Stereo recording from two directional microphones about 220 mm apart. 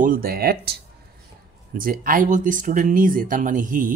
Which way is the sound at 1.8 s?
40° right (ahead or behind).